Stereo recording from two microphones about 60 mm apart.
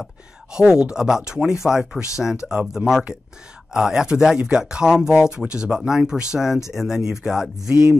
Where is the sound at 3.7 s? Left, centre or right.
Centre.